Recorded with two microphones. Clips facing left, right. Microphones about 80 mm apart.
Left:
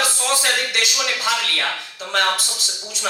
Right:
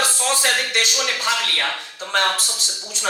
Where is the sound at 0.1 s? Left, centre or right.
Right.